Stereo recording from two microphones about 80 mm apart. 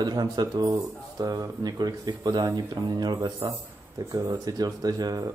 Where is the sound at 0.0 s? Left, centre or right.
Right.